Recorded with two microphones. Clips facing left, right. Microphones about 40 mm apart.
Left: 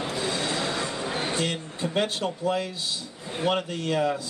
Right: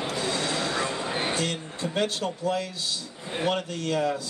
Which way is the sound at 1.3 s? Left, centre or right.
Centre.